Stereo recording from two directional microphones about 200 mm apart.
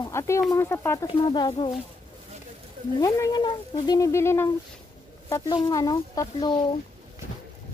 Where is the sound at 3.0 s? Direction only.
20° left (ahead or behind).